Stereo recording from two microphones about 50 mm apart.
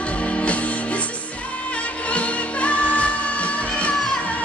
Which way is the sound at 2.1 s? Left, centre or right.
Left.